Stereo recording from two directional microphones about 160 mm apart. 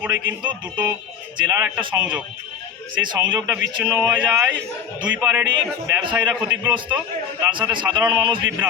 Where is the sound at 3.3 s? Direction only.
10° right (ahead or behind).